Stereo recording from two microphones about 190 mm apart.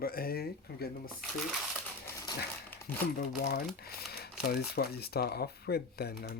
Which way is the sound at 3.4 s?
55° left (ahead or behind).